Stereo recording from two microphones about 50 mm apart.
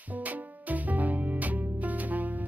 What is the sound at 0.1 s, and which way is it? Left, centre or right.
Music, right.